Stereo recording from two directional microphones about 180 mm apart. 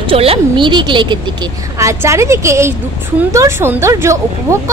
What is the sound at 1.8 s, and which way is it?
Speech, 15° right (ahead or behind).